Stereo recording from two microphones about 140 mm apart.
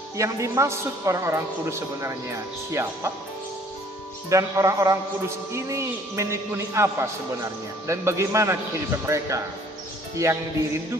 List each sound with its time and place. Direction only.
0.2 s a woman's voice: 20° right (ahead or behind)
4.3 s a woman's voice: 20° right (ahead or behind)